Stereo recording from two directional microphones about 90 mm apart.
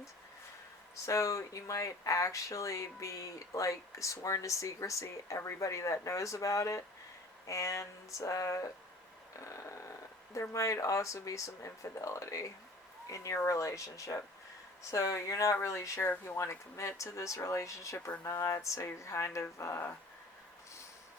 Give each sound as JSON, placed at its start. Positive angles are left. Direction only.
{"t": 1.0, "sound": "speech", "side_deg": 35}
{"t": 5.6, "sound": "speech", "side_deg": 35}